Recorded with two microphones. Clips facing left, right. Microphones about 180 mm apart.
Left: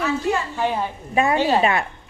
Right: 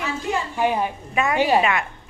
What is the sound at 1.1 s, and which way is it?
Speech, 30° left (ahead or behind).